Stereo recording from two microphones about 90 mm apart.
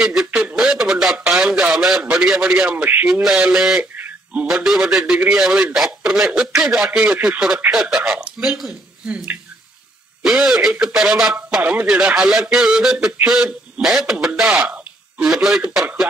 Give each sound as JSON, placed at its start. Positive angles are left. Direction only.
{"t": 0.1, "sound": "radio", "side_deg": -5}
{"t": 2.1, "sound": "a man's voice", "side_deg": -5}
{"t": 2.7, "sound": "a man's voice", "side_deg": -15}
{"t": 3.1, "sound": "a man's voice", "side_deg": -5}
{"t": 3.9, "sound": "a sound", "side_deg": -20}
{"t": 4.5, "sound": "a man's voice", "side_deg": -5}
{"t": 10.2, "sound": "a man's voice", "side_deg": -5}